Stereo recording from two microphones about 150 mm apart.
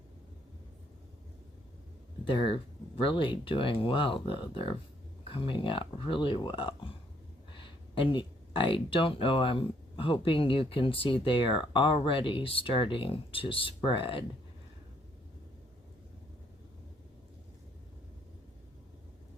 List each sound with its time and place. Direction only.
2.2 s speech: 35° left (ahead or behind)